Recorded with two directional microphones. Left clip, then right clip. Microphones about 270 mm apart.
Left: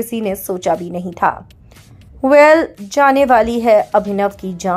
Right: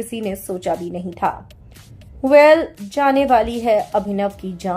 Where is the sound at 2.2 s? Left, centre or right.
Centre.